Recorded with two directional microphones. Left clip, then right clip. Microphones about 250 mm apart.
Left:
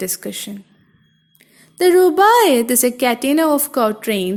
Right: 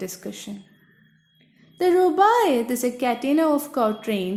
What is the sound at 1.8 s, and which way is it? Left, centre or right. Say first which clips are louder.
A woman's voice: left 6 dB; left.